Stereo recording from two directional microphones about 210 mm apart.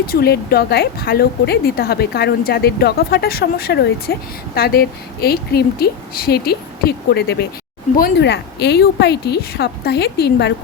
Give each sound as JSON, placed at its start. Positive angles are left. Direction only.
{"t": 0.1, "sound": "a woman's voice", "side_deg": 50}